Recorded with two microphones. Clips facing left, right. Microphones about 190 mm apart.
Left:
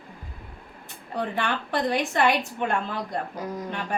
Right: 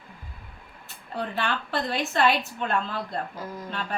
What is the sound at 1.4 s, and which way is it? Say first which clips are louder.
A woman's voice: left 2 dB; 15° left (ahead or behind).